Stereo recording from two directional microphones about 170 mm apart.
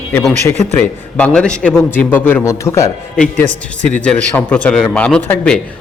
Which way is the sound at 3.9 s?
5° left (ahead or behind).